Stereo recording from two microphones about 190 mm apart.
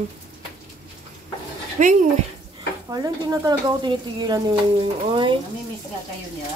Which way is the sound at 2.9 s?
20° right (ahead or behind).